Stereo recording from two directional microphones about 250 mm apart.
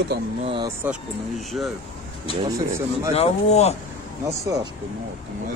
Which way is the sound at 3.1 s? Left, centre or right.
Left.